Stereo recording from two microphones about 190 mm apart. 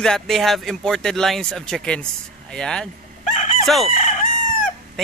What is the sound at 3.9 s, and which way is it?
Crowing, 45° left (ahead or behind).